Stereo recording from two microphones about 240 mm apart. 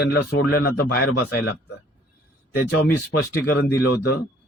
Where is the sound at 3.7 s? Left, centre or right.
Left.